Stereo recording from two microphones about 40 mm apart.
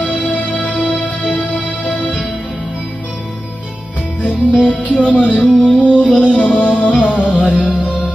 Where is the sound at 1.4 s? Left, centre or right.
Centre.